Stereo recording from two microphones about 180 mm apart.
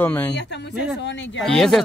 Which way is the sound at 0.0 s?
10° left (ahead or behind).